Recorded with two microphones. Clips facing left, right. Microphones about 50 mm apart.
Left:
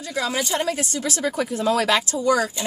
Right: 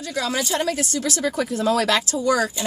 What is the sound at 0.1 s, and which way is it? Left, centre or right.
Speech, centre.